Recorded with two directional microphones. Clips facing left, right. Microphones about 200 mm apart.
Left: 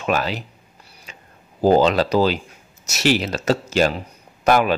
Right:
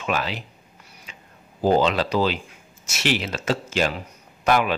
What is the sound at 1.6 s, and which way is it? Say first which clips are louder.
Speech: left 4 dB; 40° left (ahead or behind).